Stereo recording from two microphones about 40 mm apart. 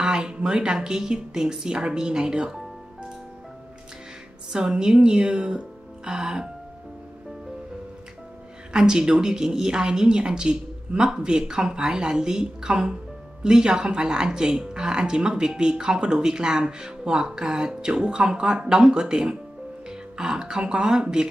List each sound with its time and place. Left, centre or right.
0.0 s speech: right
4.5 s a woman's voice: centre
8.7 s speech: centre